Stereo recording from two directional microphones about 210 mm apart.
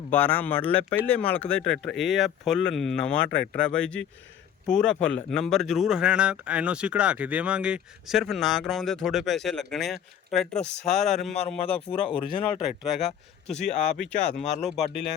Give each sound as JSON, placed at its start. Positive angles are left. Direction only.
{"t": 0.1, "sound": "speech", "side_deg": 10}
{"t": 3.2, "sound": "speech", "side_deg": 55}
{"t": 3.5, "sound": "speech", "side_deg": 5}
{"t": 14.4, "sound": "speech", "side_deg": 30}
{"t": 14.7, "sound": "speech", "side_deg": 0}